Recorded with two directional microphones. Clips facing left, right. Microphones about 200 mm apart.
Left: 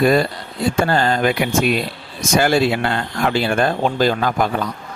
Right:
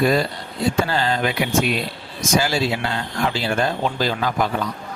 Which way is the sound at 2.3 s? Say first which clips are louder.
Left 5 dB; 55° left (ahead or behind).